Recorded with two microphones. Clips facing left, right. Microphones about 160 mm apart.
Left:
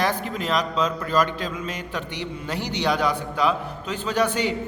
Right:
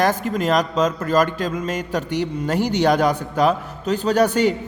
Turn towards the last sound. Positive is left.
turn(degrees=-45)  # may be behind; listen again after turning